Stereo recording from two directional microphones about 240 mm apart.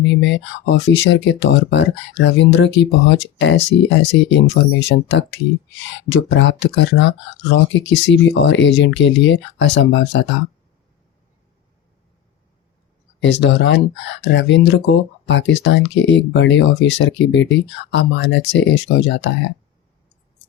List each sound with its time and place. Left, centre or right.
0.0 s speech: left
13.1 s speech: left